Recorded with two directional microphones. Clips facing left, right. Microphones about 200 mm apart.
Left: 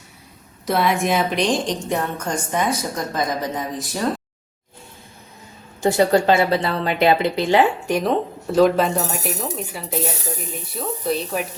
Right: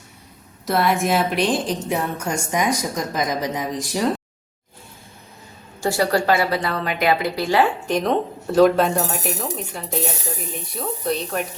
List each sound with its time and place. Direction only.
0.6 s a woman's voice: centre (ahead or behind)
5.8 s speech: 20° left (ahead or behind)
7.9 s speech: 5° left (ahead or behind)